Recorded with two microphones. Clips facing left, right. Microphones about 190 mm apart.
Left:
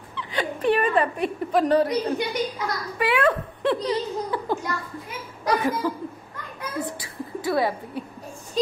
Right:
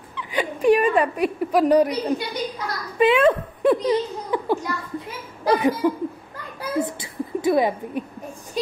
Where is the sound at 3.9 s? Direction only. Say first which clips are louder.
Right 3 dB; 15° right (ahead or behind).